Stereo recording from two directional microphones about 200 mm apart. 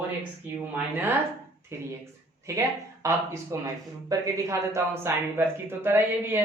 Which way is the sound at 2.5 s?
15° right (ahead or behind).